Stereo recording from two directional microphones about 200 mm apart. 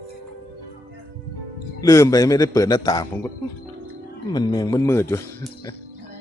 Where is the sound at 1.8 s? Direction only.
15° left (ahead or behind).